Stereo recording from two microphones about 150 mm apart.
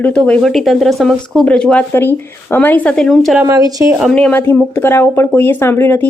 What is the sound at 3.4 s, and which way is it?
Speech, 25° right (ahead or behind).